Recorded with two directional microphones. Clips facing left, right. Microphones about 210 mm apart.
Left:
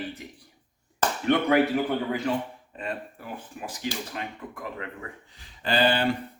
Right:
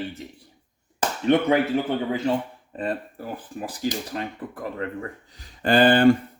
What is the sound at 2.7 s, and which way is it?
Speech, 35° right (ahead or behind).